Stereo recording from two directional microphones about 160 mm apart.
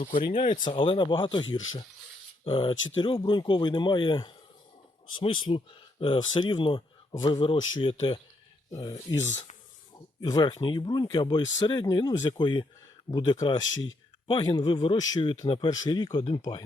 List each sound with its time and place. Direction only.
0.3 s speech: 55° left (ahead or behind)
0.6 s speech: 30° left (ahead or behind)
8.7 s speech: 20° left (ahead or behind)
10.2 s speech: 25° left (ahead or behind)